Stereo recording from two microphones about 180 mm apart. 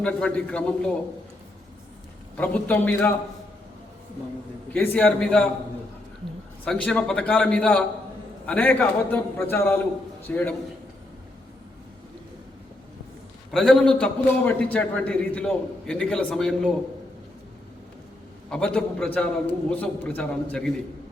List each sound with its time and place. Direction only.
0.0 s a man's voice: 5° left (ahead or behind)
2.3 s a man's voice: 10° left (ahead or behind)
4.7 s a man's voice: 10° left (ahead or behind)
6.7 s a man's voice: 5° left (ahead or behind)
13.5 s a man's voice: 5° left (ahead or behind)
18.5 s a man's voice: 5° left (ahead or behind)